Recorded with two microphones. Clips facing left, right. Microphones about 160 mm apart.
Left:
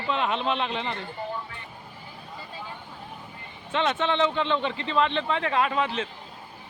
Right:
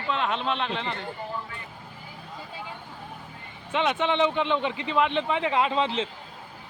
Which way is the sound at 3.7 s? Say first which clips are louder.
Even; 15° right (ahead or behind).